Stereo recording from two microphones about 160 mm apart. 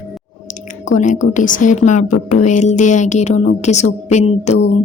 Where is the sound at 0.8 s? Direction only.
50° left (ahead or behind).